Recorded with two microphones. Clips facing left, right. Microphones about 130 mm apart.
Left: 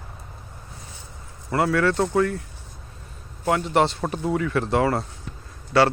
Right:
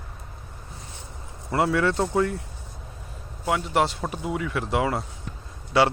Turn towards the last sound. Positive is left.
turn(degrees=-15)  # may be behind; listen again after turning